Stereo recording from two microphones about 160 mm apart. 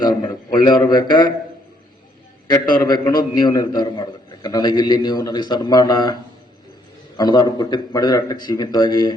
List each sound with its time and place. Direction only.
0.0 s speech: 25° left (ahead or behind)
2.5 s a man's voice: 25° left (ahead or behind)
7.2 s a man's voice: 25° left (ahead or behind)